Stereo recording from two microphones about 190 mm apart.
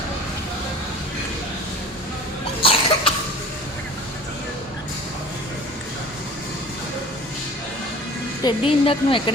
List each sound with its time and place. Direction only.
2.6 s cough: 30° left (ahead or behind)
8.4 s a woman's voice: 25° left (ahead or behind)